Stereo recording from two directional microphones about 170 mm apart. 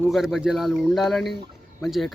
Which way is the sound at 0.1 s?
Centre (ahead or behind).